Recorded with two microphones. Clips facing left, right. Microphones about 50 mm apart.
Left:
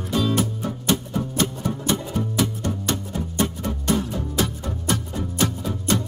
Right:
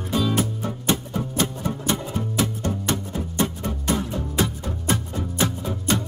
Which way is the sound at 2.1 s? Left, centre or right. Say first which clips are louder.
Left 1 dB; right.